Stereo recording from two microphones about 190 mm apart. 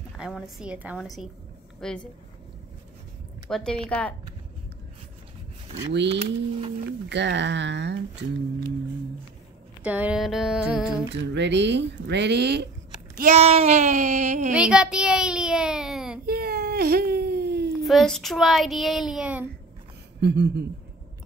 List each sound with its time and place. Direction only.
0.2 s child singing: 5° right (ahead or behind)
3.4 s child singing: 5° left (ahead or behind)
5.9 s speech: 65° right (ahead or behind)
9.8 s child singing: 5° right (ahead or behind)
11.1 s speech: 65° right (ahead or behind)
13.2 s child singing: 35° right (ahead or behind)
14.5 s a child's voice: 5° right (ahead or behind)
16.3 s baby cry: 55° right (ahead or behind)
17.8 s child singing: centre (ahead or behind)
20.2 s speech: 65° right (ahead or behind)